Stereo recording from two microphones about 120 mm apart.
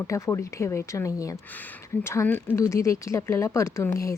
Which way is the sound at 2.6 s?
25° left (ahead or behind).